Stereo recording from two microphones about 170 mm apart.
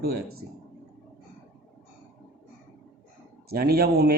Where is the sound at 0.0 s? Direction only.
65° right (ahead or behind).